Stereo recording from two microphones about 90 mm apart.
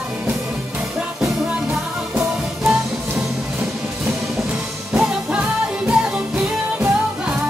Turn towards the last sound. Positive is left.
turn(degrees=-10)  # may be behind; listen again after turning